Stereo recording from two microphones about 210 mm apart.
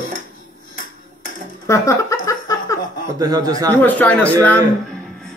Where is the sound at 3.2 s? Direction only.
15° right (ahead or behind).